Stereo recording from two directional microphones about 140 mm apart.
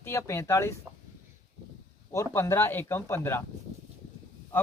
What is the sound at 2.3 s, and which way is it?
Speech, 15° left (ahead or behind).